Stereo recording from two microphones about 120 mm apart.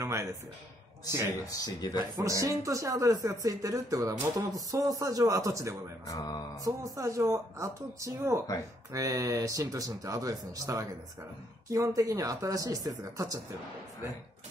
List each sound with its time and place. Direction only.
0.0 s a sound: 25° right (ahead or behind)
1.5 s speech: 30° left (ahead or behind)
2.1 s speech: 25° right (ahead or behind)
6.0 s mantra: 30° left (ahead or behind)
6.6 s speech: 25° right (ahead or behind)